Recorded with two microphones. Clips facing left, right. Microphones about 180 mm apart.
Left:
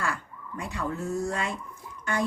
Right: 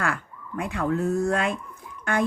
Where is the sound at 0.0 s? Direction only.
55° right (ahead or behind).